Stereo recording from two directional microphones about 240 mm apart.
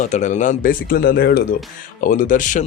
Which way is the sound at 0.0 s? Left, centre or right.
Left.